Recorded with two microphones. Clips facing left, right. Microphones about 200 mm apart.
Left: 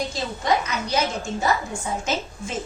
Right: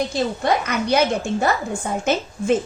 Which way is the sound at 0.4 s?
60° right (ahead or behind).